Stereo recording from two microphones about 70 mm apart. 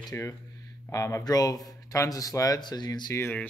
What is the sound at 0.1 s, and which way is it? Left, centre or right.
Speech, left.